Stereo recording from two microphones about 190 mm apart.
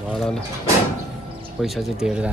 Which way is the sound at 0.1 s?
Centre (ahead or behind).